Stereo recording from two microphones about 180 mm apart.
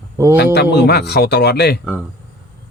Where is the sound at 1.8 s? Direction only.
5° right (ahead or behind).